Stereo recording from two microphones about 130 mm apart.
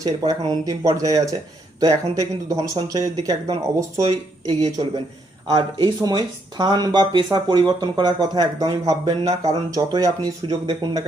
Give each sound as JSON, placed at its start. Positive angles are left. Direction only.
{"t": 0.0, "sound": "speech", "side_deg": -30}